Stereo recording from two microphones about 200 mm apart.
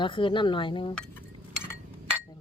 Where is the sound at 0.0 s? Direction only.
25° left (ahead or behind).